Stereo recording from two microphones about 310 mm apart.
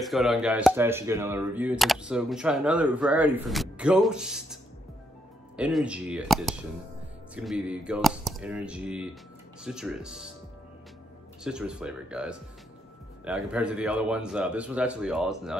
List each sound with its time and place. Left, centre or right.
0.0 s speech: centre
5.6 s speech: centre
11.4 s speech: centre